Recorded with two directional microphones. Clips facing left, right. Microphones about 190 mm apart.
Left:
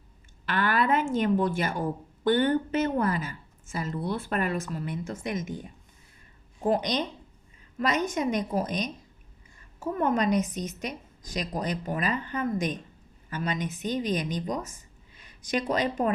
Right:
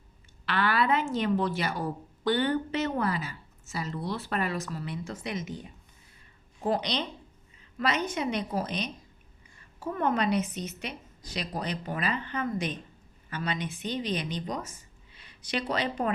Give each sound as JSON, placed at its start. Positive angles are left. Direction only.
{"t": 0.4, "sound": "a woman's voice", "side_deg": 45}
{"t": 6.7, "sound": "a woman's voice", "side_deg": 45}